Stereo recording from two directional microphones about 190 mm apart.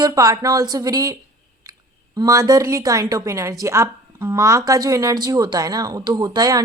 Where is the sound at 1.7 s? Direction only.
20° right (ahead or behind).